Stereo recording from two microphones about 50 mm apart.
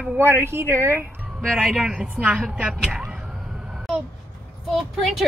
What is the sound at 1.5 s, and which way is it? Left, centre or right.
Speech, centre.